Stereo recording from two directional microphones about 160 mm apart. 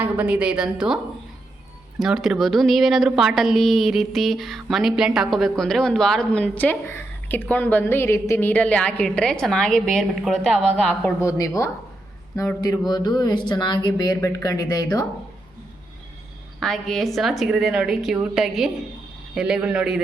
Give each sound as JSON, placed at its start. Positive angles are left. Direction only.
{"t": 0.0, "sound": "a woman's voice", "side_deg": -10}
{"t": 2.0, "sound": "a woman's voice", "side_deg": 0}
{"t": 11.2, "sound": "speech", "side_deg": 20}
{"t": 12.9, "sound": "speech", "side_deg": 25}
{"t": 16.6, "sound": "a woman's voice", "side_deg": 5}